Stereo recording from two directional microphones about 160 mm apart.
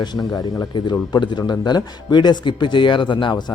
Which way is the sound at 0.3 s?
20° left (ahead or behind).